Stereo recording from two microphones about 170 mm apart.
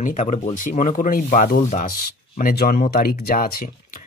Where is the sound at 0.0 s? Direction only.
45° left (ahead or behind).